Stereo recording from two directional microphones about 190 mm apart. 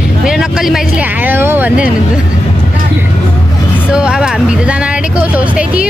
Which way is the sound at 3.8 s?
5° right (ahead or behind).